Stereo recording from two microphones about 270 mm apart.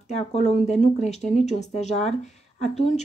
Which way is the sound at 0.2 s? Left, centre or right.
Left.